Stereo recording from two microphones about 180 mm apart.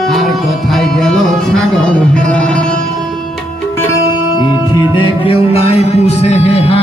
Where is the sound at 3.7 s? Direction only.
20° left (ahead or behind).